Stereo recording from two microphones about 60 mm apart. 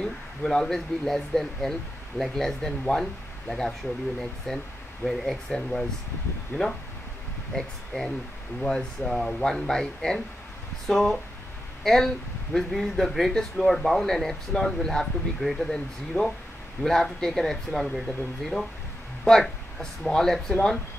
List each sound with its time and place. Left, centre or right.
0.0 s speech: centre
6.5 s speech: left
7.5 s speech: centre
19.2 s speech: centre